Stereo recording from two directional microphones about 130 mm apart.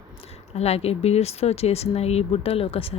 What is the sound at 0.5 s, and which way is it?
Speech, 50° left (ahead or behind).